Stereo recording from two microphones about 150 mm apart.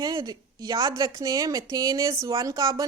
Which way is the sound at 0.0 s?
25° right (ahead or behind).